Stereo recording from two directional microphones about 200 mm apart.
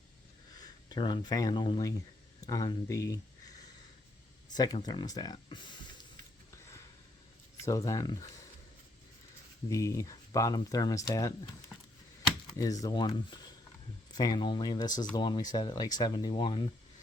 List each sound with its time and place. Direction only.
0.6 s speech: 20° left (ahead or behind)
4.5 s speech: 20° left (ahead or behind)
7.6 s speech: 15° left (ahead or behind)
9.6 s speech: 15° left (ahead or behind)
12.5 s speech: 20° left (ahead or behind)
14.2 s speech: 20° left (ahead or behind)